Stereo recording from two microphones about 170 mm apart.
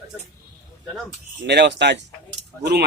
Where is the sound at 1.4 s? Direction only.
90° right.